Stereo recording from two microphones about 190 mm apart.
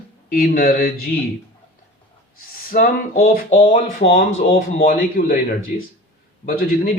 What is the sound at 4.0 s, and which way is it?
Speech, 30° left (ahead or behind).